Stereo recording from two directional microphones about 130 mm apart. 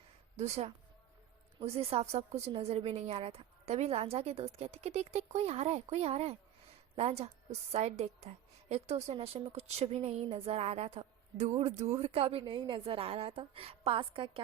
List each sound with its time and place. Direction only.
0.3 s a woman's voice: 55° right (ahead or behind)